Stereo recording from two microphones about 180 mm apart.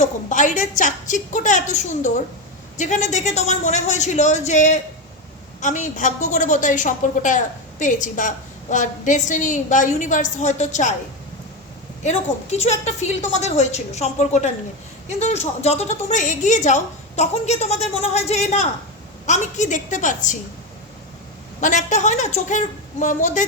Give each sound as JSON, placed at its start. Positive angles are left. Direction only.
{"t": 0.0, "sound": "a sound", "side_deg": 45}
{"t": 0.8, "sound": "a woman's voice", "side_deg": 45}
{"t": 12.0, "sound": "a woman's voice", "side_deg": 40}
{"t": 21.6, "sound": "a woman's voice", "side_deg": 45}